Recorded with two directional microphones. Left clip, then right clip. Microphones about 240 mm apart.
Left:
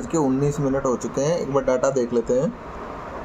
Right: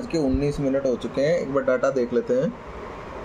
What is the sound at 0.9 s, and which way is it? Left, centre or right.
Speech, centre.